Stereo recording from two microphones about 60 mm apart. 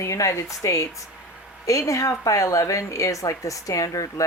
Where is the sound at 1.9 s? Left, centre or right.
Left.